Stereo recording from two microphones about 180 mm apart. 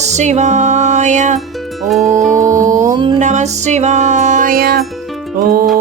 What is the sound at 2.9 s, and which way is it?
Music, 25° right (ahead or behind).